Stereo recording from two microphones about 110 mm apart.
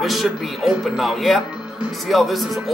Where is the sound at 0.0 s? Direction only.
Centre (ahead or behind).